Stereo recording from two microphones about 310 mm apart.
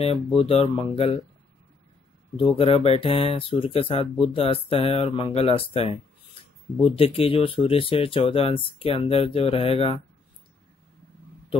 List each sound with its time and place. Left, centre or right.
0.0 s speech: centre
2.3 s speech: centre